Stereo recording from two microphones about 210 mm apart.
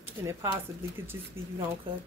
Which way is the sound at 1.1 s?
15° right (ahead or behind).